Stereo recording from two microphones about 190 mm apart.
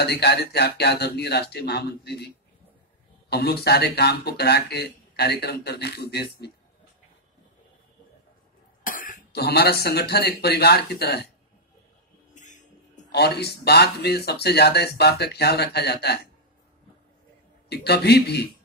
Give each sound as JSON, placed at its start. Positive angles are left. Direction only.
{"t": 0.0, "sound": "speech", "side_deg": 60}
{"t": 8.8, "sound": "speech", "side_deg": 45}
{"t": 12.4, "sound": "music", "side_deg": 40}
{"t": 13.1, "sound": "speech", "side_deg": 60}
{"t": 17.6, "sound": "speech", "side_deg": 60}